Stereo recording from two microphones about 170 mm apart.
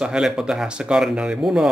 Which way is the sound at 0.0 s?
5° right (ahead or behind).